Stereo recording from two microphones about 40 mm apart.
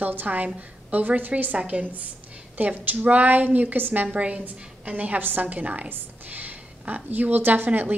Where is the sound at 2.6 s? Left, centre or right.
Right.